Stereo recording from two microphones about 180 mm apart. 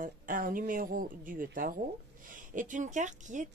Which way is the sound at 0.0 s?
50° right (ahead or behind).